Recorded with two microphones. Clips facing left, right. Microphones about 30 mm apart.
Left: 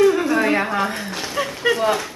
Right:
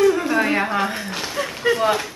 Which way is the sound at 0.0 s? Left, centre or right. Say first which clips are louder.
Left 1 dB; centre.